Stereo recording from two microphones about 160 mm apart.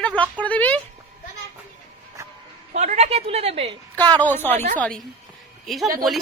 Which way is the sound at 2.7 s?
45° right (ahead or behind).